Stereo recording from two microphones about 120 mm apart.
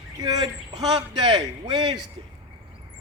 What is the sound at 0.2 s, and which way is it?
A man's voice, 30° right (ahead or behind).